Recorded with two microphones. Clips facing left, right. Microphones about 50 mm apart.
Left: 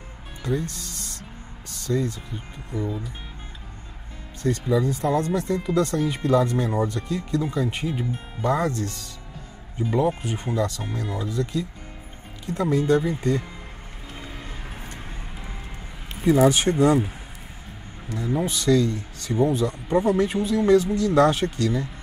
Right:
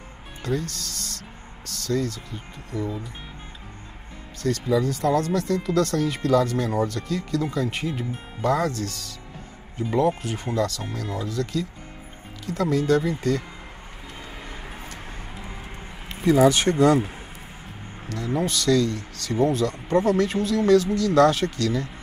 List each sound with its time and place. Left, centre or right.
0.5 s speech: left
4.4 s speech: left
16.2 s speech: centre
18.3 s speech: centre